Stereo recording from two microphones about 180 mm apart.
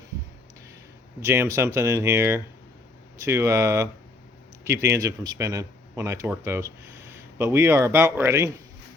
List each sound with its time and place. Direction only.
1.2 s speech: 15° right (ahead or behind)